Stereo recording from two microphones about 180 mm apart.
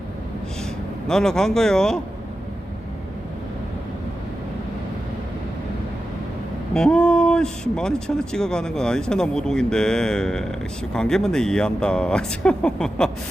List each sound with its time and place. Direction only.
1.0 s speech: 5° left (ahead or behind)
6.7 s speech: 5° left (ahead or behind)